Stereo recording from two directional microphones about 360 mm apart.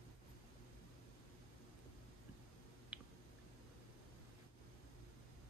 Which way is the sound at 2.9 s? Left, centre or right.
Centre.